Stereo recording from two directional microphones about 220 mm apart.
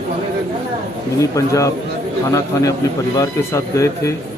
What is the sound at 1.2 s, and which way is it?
A man's voice, 15° left (ahead or behind).